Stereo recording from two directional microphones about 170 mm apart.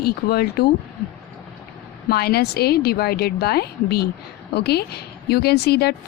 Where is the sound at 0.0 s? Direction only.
65° left (ahead or behind).